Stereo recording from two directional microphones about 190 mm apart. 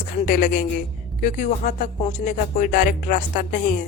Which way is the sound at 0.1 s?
45° left (ahead or behind).